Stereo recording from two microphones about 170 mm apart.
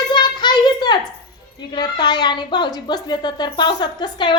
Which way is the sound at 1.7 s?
25° left (ahead or behind).